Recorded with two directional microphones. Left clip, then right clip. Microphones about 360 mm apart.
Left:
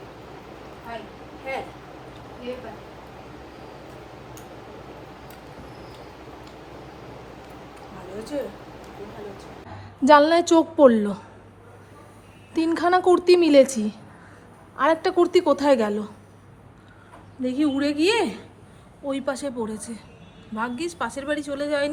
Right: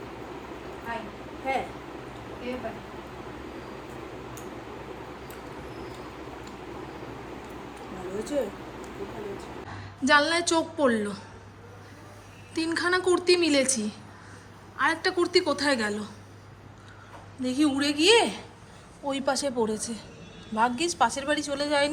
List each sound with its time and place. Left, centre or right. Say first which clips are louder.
1.5 s a woman's voice: right 2 dB; centre
10.0 s a woman's voice: left 7 dB; centre
12.5 s a woman's voice: left 6 dB; centre
17.4 s a woman's voice: left 2 dB; centre